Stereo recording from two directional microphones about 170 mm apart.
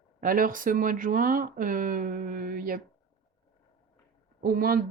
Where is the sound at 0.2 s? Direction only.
55° right (ahead or behind).